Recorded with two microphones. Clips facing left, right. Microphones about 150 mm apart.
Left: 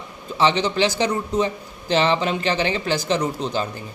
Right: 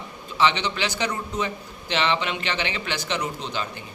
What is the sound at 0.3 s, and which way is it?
A man's voice, 35° left (ahead or behind).